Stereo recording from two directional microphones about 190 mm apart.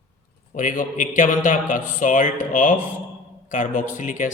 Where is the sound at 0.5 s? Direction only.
45° left (ahead or behind).